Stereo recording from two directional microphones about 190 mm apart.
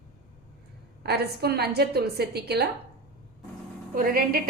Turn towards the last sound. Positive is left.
turn(degrees=-50)  # may be behind; listen again after turning